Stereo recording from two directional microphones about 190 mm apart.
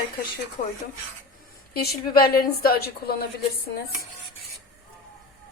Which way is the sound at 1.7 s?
50° left (ahead or behind).